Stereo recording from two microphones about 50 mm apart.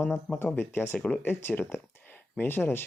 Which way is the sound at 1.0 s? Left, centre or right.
Left.